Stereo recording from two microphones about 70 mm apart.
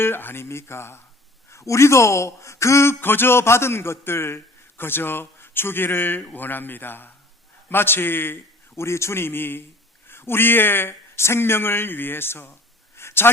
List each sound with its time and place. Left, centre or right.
0.0 s speech: left
3.0 s speech: left
13.0 s a sound: left